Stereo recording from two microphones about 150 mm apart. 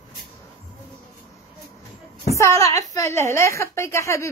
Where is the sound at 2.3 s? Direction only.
20° left (ahead or behind).